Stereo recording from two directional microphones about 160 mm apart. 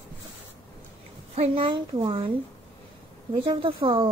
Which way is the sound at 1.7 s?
25° right (ahead or behind).